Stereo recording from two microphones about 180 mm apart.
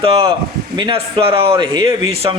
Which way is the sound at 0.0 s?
30° right (ahead or behind).